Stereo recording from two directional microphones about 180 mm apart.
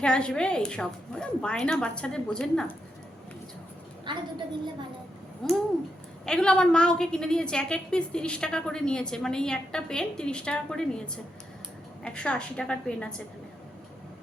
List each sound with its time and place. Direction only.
0.0 s a woman's voice: 5° left (ahead or behind)
4.1 s a woman's voice: 25° right (ahead or behind)
5.4 s a woman's voice: centre (ahead or behind)